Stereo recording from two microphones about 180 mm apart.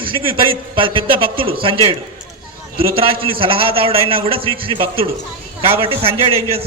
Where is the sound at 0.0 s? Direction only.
30° right (ahead or behind).